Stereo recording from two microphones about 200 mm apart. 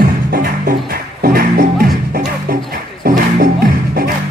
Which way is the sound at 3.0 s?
45° right (ahead or behind).